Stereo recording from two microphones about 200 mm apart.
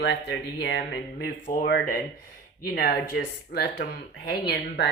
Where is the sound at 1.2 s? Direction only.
45° left (ahead or behind).